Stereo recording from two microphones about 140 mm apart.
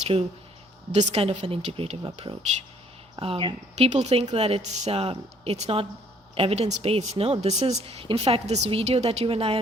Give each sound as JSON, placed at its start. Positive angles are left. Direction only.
{"t": 0.0, "sound": "a woman's voice", "side_deg": -45}
{"t": 3.8, "sound": "a woman's voice", "side_deg": -55}